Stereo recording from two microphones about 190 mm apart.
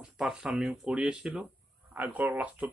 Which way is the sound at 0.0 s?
5° right (ahead or behind).